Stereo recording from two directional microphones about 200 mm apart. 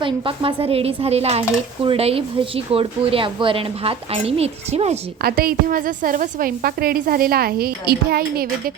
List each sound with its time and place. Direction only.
0.0 s a woman's voice: 25° right (ahead or behind)
5.2 s a woman's voice: 50° right (ahead or behind)